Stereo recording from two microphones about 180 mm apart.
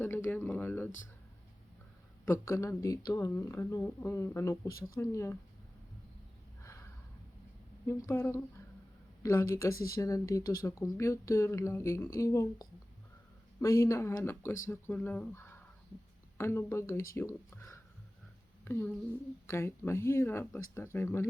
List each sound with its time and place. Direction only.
0.0 s speech: 10° left (ahead or behind)
2.2 s speech: 15° left (ahead or behind)
6.6 s a sound: 15° left (ahead or behind)
7.9 s speech: 15° left (ahead or behind)